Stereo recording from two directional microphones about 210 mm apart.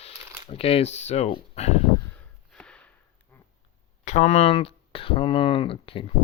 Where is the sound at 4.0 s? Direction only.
35° left (ahead or behind).